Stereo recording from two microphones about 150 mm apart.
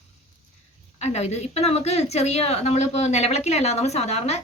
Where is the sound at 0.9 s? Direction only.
45° left (ahead or behind).